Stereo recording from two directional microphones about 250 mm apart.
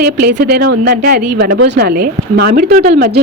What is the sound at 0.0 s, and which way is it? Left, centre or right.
A woman's voice, right.